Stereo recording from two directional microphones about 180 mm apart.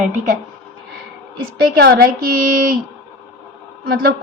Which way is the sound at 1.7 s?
55° right (ahead or behind).